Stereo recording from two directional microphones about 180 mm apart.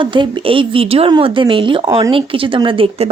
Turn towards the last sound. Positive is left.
turn(degrees=-30)  # may be behind; listen again after turning